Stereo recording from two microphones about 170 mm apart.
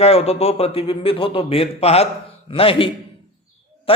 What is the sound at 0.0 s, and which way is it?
A man's voice, 35° left (ahead or behind).